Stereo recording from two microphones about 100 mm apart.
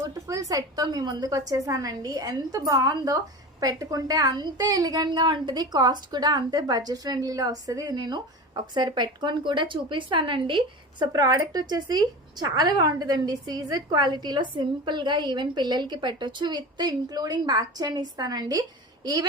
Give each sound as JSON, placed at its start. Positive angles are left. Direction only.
{"t": 0.0, "sound": "a woman's voice", "side_deg": -35}
{"t": 11.0, "sound": "speech", "side_deg": -40}